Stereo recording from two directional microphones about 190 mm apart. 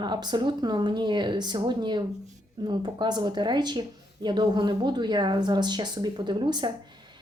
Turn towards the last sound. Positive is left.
turn(degrees=-25)  # may be behind; listen again after turning